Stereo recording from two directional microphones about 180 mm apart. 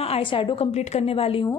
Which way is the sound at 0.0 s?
30° left (ahead or behind).